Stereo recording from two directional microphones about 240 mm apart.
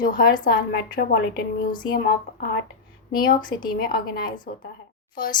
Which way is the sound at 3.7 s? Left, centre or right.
Left.